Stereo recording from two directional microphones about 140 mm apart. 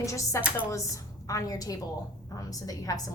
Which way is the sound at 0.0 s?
20° left (ahead or behind).